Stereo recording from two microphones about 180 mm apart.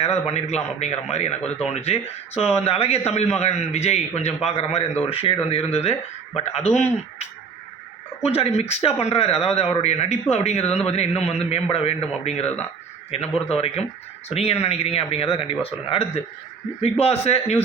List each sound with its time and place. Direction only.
0.0 s speech: 35° left (ahead or behind)